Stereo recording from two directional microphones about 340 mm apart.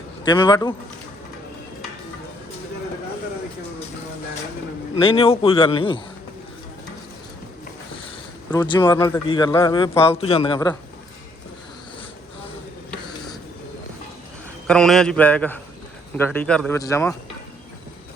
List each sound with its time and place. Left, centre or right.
0.3 s speech: centre
4.9 s speech: centre
8.4 s speech: centre
14.7 s speech: centre